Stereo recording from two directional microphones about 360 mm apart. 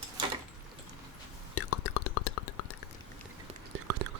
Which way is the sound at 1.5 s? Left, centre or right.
Left.